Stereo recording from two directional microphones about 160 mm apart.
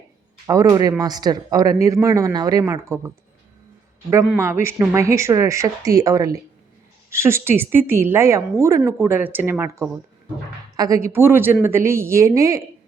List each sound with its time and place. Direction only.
0.4 s speech: 20° right (ahead or behind)
4.4 s a woman's voice: 15° right (ahead or behind)